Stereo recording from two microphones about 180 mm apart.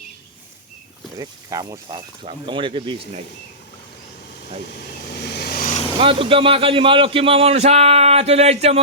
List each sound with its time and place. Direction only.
1.2 s speech: 20° right (ahead or behind)
5.3 s vehicle: 60° left (ahead or behind)
6.0 s a man's voice: 30° right (ahead or behind)